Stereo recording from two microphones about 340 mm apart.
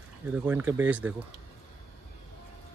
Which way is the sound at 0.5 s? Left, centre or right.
Centre.